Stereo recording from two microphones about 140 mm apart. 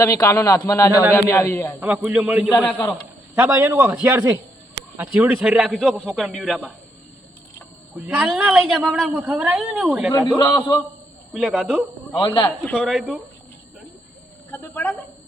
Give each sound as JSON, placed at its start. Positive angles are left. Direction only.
{"t": 0.0, "sound": "a man's voice", "side_deg": 20}
{"t": 2.0, "sound": "a man's voice", "side_deg": -5}
{"t": 7.9, "sound": "a man's voice", "side_deg": -10}
{"t": 10.4, "sound": "a man's voice", "side_deg": 25}
{"t": 11.3, "sound": "a man's voice", "side_deg": -5}
{"t": 12.1, "sound": "speech", "side_deg": 35}
{"t": 12.7, "sound": "speech", "side_deg": 0}
{"t": 14.5, "sound": "a woman's voice", "side_deg": 15}